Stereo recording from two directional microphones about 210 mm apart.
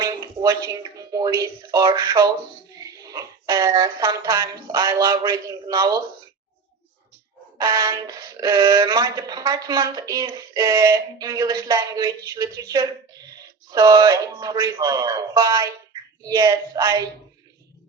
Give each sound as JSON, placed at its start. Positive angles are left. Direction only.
{"t": 0.0, "sound": "speech", "side_deg": -15}
{"t": 7.6, "sound": "speech", "side_deg": -15}